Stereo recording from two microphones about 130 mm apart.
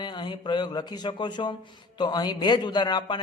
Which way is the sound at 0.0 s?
35° left (ahead or behind).